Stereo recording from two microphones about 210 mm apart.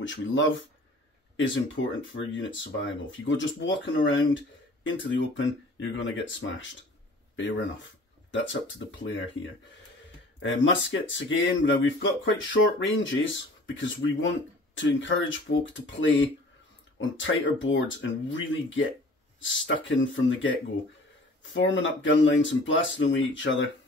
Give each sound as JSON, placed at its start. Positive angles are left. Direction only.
{"t": 0.0, "sound": "speech", "side_deg": 60}
{"t": 8.3, "sound": "speech", "side_deg": 60}
{"t": 10.4, "sound": "speech", "side_deg": 65}
{"t": 21.6, "sound": "speech", "side_deg": 65}